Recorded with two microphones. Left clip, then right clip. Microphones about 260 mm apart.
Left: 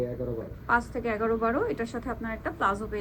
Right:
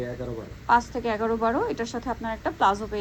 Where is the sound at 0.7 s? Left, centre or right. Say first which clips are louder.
Right 5 dB; centre.